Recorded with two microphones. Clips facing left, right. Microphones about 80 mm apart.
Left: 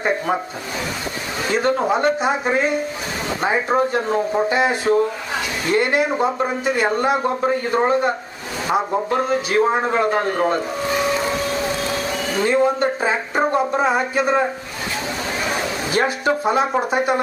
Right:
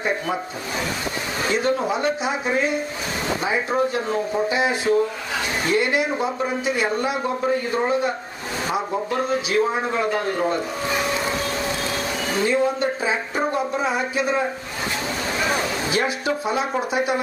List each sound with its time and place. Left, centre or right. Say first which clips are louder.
1.5 s speech: left 3 dB; left
12.4 s speech: left 4 dB; left
15.9 s speech: left 6 dB; left